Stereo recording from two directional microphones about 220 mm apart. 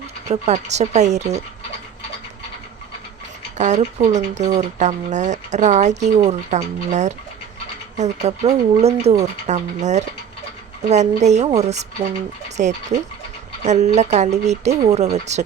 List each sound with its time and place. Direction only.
0.3 s speech: 30° right (ahead or behind)
3.6 s speech: 30° right (ahead or behind)